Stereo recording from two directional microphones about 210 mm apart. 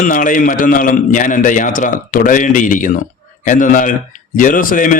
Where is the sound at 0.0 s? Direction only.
40° left (ahead or behind).